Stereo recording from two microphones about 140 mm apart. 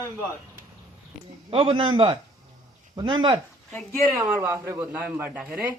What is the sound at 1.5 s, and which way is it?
A man's voice, 40° right (ahead or behind).